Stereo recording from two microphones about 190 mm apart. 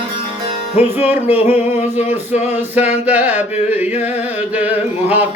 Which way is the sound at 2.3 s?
35° left (ahead or behind).